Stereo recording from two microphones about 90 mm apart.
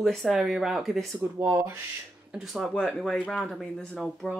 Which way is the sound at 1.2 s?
25° right (ahead or behind).